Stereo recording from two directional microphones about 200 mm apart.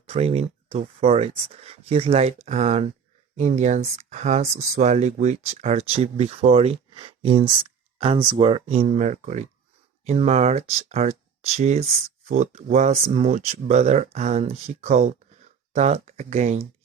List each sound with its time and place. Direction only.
0.0 s speech: 30° right (ahead or behind)